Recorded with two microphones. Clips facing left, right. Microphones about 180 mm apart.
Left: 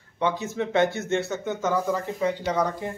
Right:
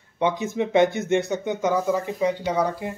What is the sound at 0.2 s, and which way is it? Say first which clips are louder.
A man's voice: right 3 dB; 15° right (ahead or behind).